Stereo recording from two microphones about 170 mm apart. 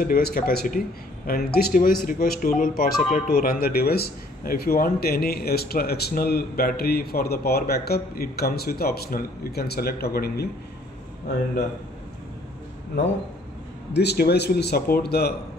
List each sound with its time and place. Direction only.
0.0 s speech: 60° left (ahead or behind)
13.9 s a man's voice: 70° left (ahead or behind)